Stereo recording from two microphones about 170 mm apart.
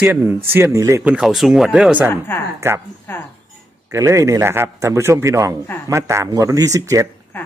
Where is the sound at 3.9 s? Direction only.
20° right (ahead or behind).